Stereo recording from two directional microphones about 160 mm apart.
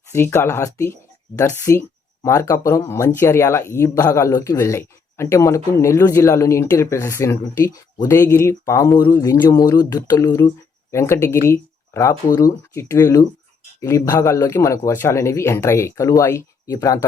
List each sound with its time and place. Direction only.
0.1 s a man's voice: 15° left (ahead or behind)